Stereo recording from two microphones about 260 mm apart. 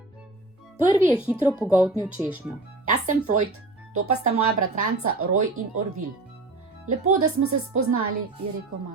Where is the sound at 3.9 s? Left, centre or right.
Right.